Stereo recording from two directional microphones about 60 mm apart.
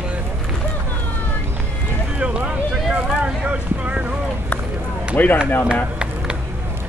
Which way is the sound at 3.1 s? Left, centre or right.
Right.